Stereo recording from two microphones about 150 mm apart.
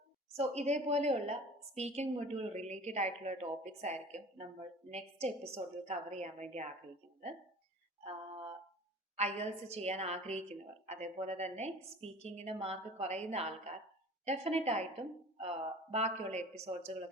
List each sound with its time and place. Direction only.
0.3 s a woman's voice: 45° right (ahead or behind)
8.0 s music: 35° right (ahead or behind)
9.1 s a woman's voice: 45° right (ahead or behind)